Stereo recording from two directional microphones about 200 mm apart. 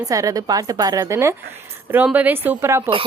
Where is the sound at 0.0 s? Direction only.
15° right (ahead or behind).